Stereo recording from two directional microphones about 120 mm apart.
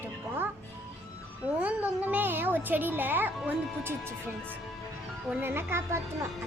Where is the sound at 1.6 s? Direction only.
15° right (ahead or behind).